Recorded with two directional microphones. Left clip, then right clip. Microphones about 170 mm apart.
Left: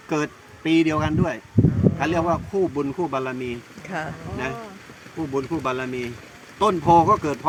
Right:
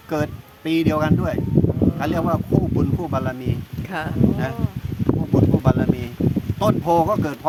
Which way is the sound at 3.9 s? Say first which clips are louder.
Right 7 dB; 20° right (ahead or behind).